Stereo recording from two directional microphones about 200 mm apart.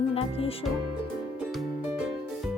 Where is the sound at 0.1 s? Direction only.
30° left (ahead or behind).